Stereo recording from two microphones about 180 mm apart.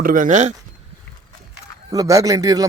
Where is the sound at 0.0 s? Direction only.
50° right (ahead or behind).